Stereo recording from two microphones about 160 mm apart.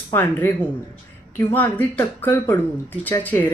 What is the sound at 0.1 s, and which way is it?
Speech, 15° left (ahead or behind).